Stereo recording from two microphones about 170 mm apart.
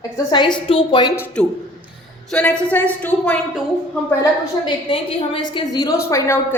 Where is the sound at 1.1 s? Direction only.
10° left (ahead or behind).